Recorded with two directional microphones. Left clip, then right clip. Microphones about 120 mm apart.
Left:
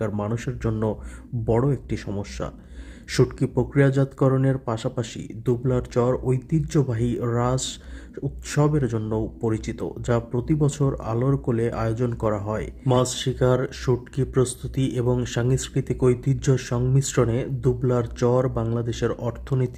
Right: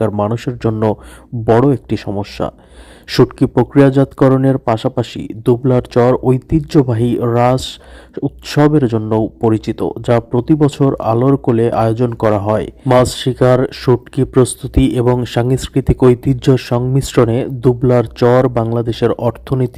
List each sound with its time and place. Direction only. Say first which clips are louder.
0.0 s speech: right 12 dB; 40° right (ahead or behind)